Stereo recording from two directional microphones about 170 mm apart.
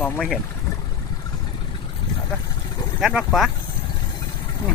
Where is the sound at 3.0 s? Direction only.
Centre (ahead or behind).